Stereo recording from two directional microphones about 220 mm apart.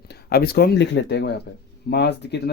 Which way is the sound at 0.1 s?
45° left (ahead or behind).